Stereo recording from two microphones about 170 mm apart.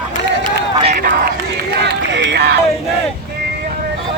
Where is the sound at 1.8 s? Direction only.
90° right.